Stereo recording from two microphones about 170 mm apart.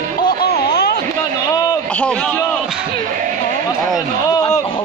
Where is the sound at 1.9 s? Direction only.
5° left (ahead or behind).